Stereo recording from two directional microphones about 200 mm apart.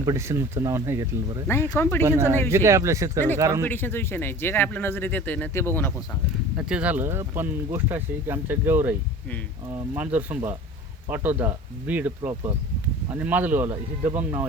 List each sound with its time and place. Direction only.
0.0 s speech: 15° right (ahead or behind)
1.5 s speech: 10° left (ahead or behind)
2.0 s speech: 15° right (ahead or behind)
3.6 s speech: 10° left (ahead or behind)
6.6 s speech: 5° right (ahead or behind)
12.3 s speech: 20° right (ahead or behind)
13.1 s speech: 10° right (ahead or behind)